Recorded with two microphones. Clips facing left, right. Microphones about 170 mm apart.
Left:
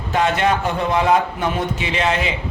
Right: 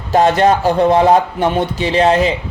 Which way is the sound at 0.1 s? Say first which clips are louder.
Right 7 dB; 35° right (ahead or behind).